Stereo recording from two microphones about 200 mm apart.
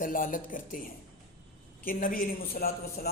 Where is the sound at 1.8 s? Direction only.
45° left (ahead or behind).